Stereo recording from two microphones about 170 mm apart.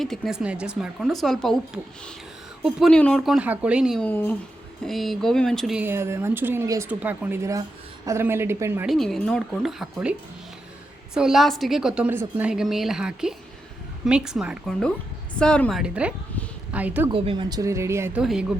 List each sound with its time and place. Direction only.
0.0 s a woman's voice: centre (ahead or behind)
4.0 s speech: 10° left (ahead or behind)
4.9 s a woman's voice: centre (ahead or behind)
5.8 s speech: 15° right (ahead or behind)
8.9 s a woman's voice: centre (ahead or behind)
15.8 s speech: 5° right (ahead or behind)
17.1 s speech: 30° right (ahead or behind); by 18.2 s 15° right (ahead or behind)
18.2 s a woman's voice: 5° right (ahead or behind)